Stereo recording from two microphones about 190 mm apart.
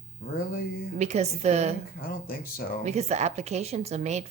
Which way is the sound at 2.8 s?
35° right (ahead or behind).